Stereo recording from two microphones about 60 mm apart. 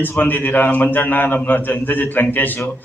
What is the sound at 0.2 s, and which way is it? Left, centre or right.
A man's voice, left.